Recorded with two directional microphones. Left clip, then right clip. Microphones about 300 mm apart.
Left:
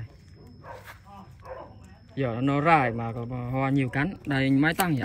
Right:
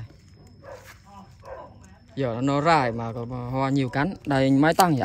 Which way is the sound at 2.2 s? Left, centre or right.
Centre.